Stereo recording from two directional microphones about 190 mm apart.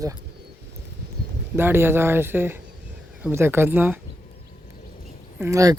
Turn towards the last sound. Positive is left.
turn(degrees=-15)  # may be behind; listen again after turning